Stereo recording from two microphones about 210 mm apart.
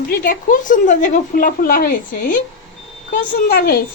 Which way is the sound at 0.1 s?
45° left (ahead or behind).